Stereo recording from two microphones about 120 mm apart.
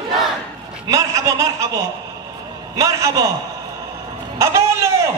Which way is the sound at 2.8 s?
25° right (ahead or behind).